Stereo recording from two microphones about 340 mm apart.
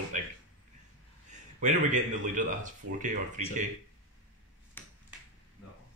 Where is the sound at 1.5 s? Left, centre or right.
Right.